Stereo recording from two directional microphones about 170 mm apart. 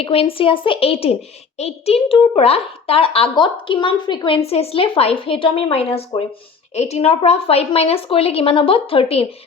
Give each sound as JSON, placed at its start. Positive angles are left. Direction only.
{"t": 0.0, "sound": "a child's voice", "side_deg": 35}